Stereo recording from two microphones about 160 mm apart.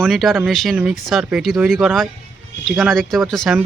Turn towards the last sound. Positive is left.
turn(degrees=0)  # may be behind; listen again after turning